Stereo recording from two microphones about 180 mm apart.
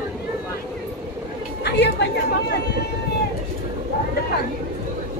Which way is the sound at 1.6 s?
70° left (ahead or behind).